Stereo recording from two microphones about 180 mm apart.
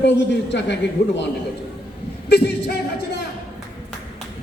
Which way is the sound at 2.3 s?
65° left (ahead or behind).